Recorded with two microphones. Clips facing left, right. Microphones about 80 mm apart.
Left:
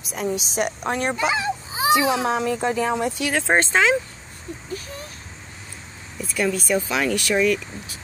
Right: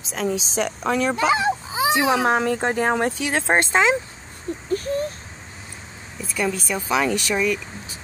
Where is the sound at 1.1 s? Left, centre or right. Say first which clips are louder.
Right 3 dB; right.